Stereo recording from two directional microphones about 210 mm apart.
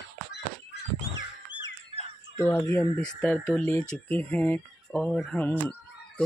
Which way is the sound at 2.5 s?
15° left (ahead or behind).